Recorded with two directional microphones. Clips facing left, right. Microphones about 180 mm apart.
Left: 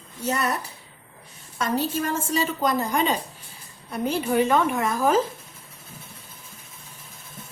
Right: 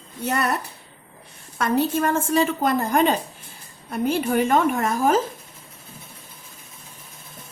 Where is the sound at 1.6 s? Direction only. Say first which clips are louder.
Right 4 dB; 55° right (ahead or behind).